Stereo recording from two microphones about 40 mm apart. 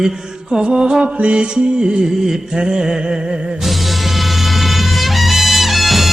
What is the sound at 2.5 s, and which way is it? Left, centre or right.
Music, centre.